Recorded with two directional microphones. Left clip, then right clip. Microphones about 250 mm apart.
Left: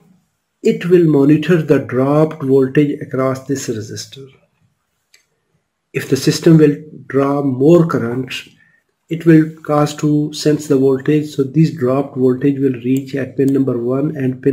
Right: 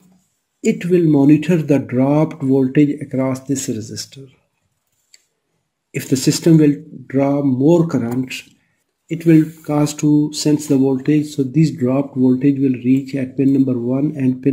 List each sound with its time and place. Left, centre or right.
0.7 s speech: right
5.9 s speech: right